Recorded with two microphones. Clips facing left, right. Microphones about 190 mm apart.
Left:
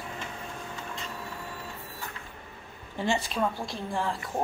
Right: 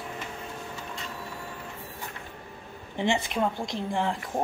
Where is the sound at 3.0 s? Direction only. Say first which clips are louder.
Right 2 dB; 20° right (ahead or behind).